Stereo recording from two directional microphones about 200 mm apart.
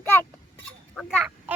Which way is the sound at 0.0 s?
10° left (ahead or behind).